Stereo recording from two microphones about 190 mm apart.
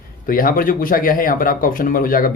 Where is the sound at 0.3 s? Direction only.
50° left (ahead or behind).